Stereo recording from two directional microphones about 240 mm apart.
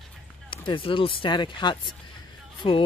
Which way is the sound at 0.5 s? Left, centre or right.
Left.